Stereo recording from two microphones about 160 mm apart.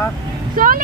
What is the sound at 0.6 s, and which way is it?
Speech, 60° right (ahead or behind).